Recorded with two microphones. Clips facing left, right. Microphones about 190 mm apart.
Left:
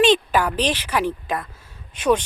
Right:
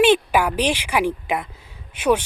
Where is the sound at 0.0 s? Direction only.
10° right (ahead or behind).